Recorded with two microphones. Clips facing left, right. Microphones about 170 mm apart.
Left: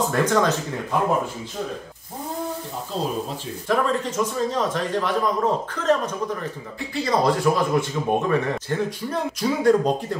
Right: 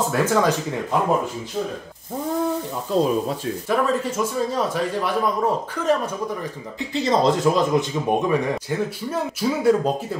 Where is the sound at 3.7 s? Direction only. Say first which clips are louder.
Even; 10° right (ahead or behind).